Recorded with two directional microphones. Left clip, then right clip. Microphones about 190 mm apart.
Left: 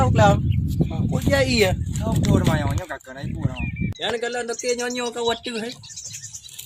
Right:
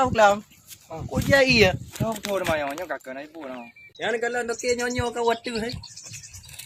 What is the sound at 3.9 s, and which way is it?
Speech, centre (ahead or behind).